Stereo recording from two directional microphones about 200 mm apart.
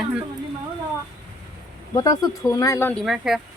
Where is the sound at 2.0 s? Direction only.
20° left (ahead or behind).